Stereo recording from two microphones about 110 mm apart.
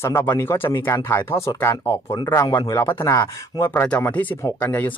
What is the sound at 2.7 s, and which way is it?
Speech, 25° left (ahead or behind).